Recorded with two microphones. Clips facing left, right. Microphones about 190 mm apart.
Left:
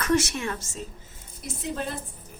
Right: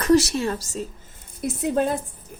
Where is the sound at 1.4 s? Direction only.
50° right (ahead or behind).